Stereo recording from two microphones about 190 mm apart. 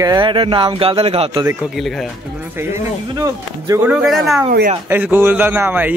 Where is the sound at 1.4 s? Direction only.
Centre (ahead or behind).